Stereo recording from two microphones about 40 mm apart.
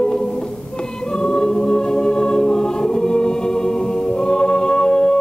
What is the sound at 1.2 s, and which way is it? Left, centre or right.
Choir, centre.